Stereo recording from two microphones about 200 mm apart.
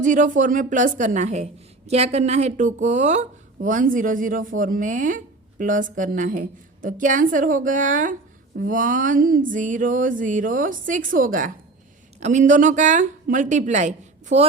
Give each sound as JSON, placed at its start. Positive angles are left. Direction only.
{"t": 0.0, "sound": "a woman's voice", "side_deg": -40}